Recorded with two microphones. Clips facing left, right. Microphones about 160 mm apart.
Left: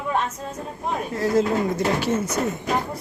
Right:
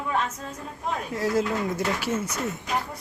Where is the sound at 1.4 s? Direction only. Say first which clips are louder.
Left 5 dB; 35° left (ahead or behind).